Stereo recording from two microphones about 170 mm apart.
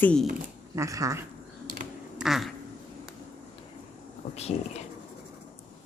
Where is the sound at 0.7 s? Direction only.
20° right (ahead or behind).